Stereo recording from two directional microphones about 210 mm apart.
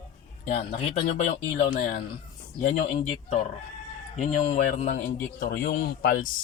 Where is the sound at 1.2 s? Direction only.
35° left (ahead or behind).